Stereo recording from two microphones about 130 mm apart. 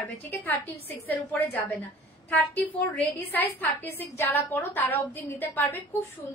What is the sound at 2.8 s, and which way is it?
A woman's voice, 15° left (ahead or behind).